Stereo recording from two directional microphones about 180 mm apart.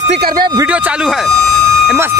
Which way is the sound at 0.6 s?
10° right (ahead or behind).